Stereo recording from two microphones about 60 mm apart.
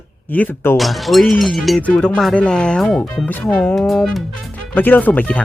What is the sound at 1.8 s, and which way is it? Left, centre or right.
Speech, left.